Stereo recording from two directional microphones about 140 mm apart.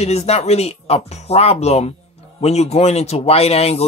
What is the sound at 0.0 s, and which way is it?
Speech, 50° left (ahead or behind).